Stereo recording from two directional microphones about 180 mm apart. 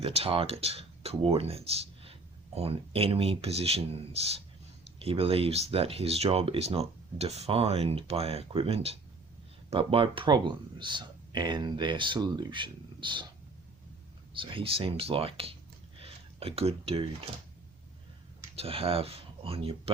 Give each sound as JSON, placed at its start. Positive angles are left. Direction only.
{"t": 0.0, "sound": "speech", "side_deg": -35}
{"t": 14.3, "sound": "speech", "side_deg": -30}
{"t": 16.0, "sound": "a sound", "side_deg": -35}
{"t": 18.5, "sound": "speech", "side_deg": -35}